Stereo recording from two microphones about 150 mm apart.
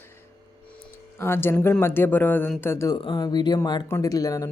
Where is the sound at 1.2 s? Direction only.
15° left (ahead or behind).